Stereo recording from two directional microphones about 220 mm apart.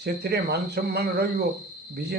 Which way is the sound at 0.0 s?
50° right (ahead or behind).